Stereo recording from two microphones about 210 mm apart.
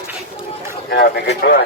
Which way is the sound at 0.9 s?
50° left (ahead or behind).